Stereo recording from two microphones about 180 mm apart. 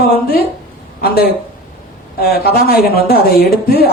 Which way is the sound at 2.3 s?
60° left (ahead or behind).